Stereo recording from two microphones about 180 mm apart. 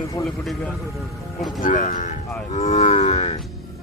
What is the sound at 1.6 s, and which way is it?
Speech, 45° left (ahead or behind).